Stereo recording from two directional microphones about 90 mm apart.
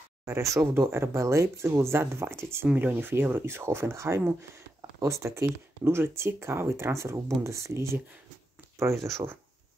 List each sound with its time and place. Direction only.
0.2 s speech: 35° right (ahead or behind)